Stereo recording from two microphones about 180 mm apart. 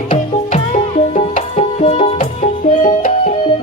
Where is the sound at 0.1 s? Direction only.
35° left (ahead or behind).